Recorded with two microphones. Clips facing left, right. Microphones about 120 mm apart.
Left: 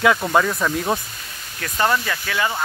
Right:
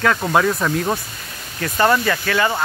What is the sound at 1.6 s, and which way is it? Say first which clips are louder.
Speech: right 4 dB; 5° right (ahead or behind).